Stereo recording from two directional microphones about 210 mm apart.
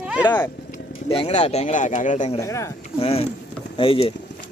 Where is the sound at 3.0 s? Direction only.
25° left (ahead or behind).